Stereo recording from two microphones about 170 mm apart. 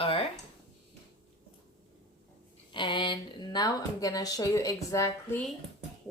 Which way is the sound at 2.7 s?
30° left (ahead or behind).